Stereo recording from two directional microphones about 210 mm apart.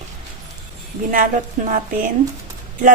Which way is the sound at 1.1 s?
40° right (ahead or behind).